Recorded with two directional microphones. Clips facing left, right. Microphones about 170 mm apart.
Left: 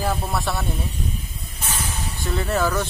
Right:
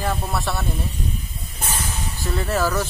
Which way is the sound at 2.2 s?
Centre (ahead or behind).